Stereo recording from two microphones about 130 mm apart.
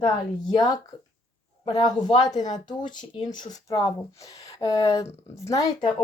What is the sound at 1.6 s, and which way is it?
Speech, 35° left (ahead or behind).